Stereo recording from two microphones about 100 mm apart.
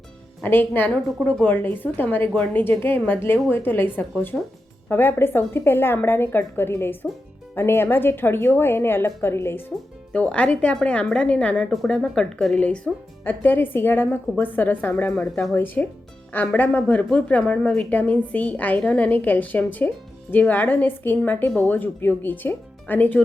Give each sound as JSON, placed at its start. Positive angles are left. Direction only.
{"t": 0.4, "sound": "a woman's voice", "side_deg": 20}